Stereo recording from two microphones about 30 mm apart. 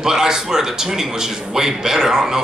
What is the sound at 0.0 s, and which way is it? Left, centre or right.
A man's voice, centre.